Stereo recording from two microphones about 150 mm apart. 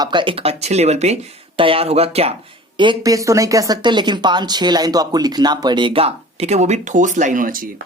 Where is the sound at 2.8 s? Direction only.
30° right (ahead or behind).